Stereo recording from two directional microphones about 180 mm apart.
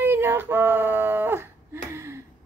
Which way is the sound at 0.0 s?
10° right (ahead or behind).